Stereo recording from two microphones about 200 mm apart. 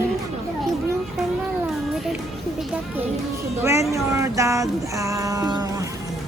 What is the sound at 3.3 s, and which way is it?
Music, 15° right (ahead or behind).